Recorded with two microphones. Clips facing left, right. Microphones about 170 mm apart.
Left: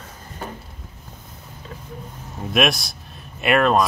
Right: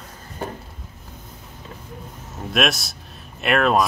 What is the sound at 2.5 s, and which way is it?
A man's voice, centre (ahead or behind).